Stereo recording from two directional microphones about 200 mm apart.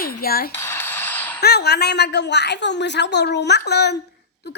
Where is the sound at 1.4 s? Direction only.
55° left (ahead or behind).